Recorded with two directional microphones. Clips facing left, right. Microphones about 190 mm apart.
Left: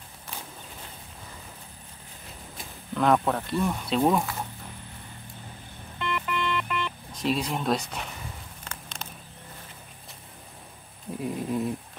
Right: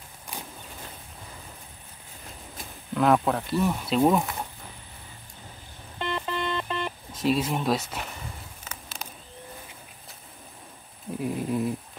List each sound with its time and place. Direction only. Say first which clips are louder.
2.5 s speech: right 2 dB; centre (ahead or behind)
5.9 s music: even; 30° right (ahead or behind)
7.1 s speech: right 3 dB; centre (ahead or behind)
8.6 s a sound: even; centre (ahead or behind)
11.1 s speech: right 1 dB; centre (ahead or behind)